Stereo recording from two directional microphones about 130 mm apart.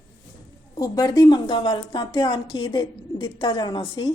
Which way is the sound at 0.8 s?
30° left (ahead or behind).